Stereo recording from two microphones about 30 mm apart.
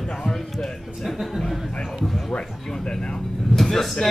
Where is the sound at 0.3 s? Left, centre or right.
Centre.